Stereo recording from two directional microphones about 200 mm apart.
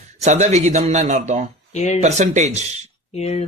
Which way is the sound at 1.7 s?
35° left (ahead or behind).